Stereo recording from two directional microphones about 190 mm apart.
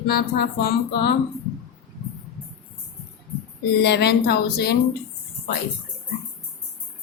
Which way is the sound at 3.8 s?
60° left (ahead or behind).